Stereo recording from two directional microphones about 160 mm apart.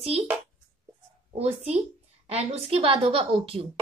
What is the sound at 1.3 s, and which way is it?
A woman's voice, 40° right (ahead or behind).